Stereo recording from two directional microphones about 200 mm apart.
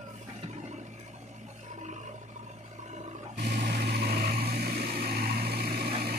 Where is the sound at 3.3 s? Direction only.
55° right (ahead or behind).